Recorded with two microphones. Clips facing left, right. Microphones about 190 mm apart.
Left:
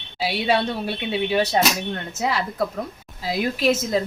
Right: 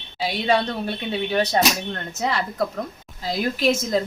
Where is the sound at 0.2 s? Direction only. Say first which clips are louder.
Even; 10° left (ahead or behind).